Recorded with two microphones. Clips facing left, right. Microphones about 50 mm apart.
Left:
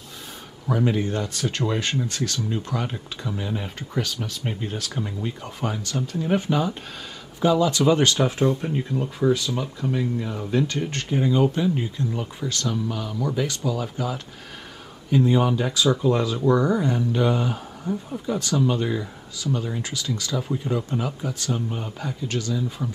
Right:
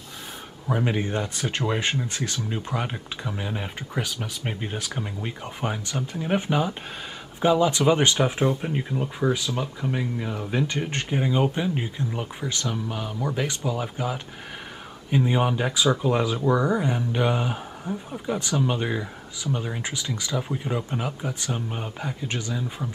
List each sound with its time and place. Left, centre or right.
0.7 s speech: right
10.7 s speech: right